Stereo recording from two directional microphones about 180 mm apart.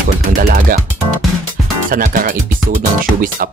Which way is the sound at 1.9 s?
50° right (ahead or behind).